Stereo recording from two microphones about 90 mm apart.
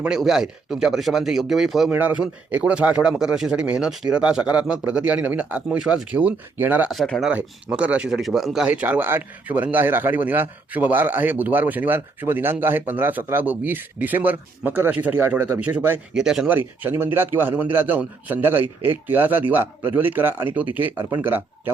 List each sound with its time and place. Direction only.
0.2 s speech: 5° right (ahead or behind)
1.9 s speech: 20° right (ahead or behind)
6.9 s speech: centre (ahead or behind)
7.3 s speech: 15° right (ahead or behind)
8.6 s speech: 15° right (ahead or behind)
16.1 s speech: 5° right (ahead or behind)
16.6 s speech: 25° right (ahead or behind)